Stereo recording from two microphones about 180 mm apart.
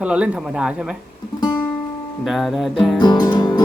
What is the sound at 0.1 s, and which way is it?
Speech, 5° right (ahead or behind).